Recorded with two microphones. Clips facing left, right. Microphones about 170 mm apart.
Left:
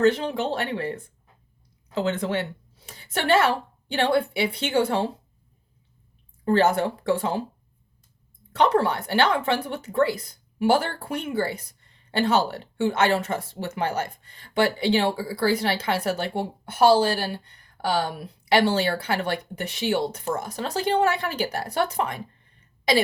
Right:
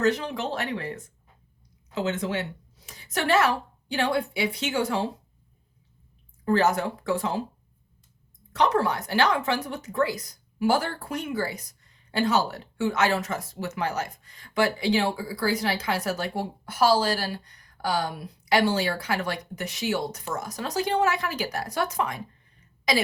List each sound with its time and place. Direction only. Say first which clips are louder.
0.0 s a woman's voice: left 4 dB; 30° left (ahead or behind)
6.4 s speech: left 2 dB; 30° left (ahead or behind)
8.5 s a woman's voice: left 3 dB; 30° left (ahead or behind)